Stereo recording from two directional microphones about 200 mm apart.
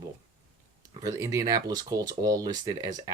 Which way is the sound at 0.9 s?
20° right (ahead or behind).